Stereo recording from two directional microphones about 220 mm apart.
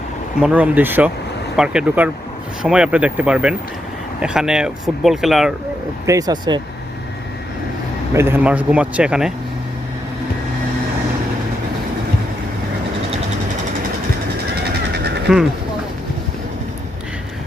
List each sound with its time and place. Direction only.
0.3 s speech: 5° right (ahead or behind)
6.1 s speech: 15° right (ahead or behind)
8.1 s speech: 10° right (ahead or behind)
14.6 s train: 50° right (ahead or behind)